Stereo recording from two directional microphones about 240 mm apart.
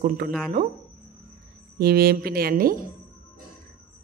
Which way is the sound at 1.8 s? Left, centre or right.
Right.